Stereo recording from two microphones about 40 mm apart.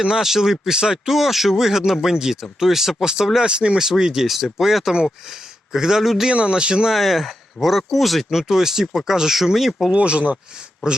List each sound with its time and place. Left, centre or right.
0.0 s speech: centre
1.1 s a man's voice: centre; by 3.8 s right
3.8 s speech: centre
6.2 s a man's voice: right
6.9 s speech: centre
9.9 s speech: right